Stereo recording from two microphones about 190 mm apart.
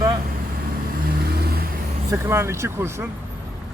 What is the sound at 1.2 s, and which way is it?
Vehicle, 55° right (ahead or behind).